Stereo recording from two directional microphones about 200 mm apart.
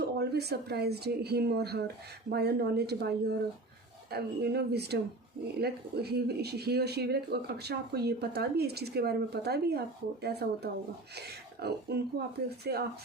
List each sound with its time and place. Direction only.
0.2 s speech: 55° right (ahead or behind)